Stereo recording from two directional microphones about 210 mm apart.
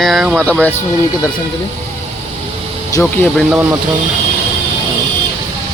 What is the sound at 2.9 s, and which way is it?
Speech, 10° left (ahead or behind).